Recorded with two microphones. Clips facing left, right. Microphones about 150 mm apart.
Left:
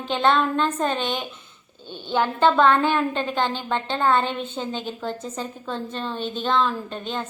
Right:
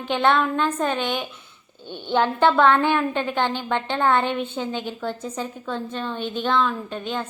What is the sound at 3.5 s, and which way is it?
A woman's voice, 15° right (ahead or behind).